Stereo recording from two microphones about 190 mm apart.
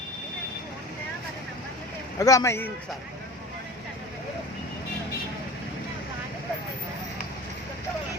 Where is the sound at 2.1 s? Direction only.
15° left (ahead or behind).